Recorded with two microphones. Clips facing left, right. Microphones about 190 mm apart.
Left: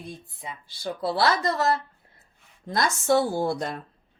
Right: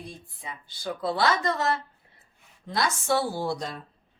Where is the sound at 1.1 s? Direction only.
40° left (ahead or behind); by 3.8 s 55° left (ahead or behind).